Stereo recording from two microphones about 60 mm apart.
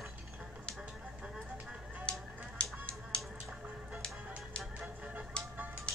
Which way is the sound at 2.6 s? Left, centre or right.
Centre.